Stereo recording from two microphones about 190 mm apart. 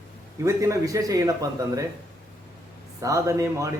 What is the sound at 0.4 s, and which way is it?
A man's voice, 15° right (ahead or behind).